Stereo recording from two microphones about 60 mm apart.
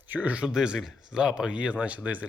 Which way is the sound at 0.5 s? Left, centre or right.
Centre.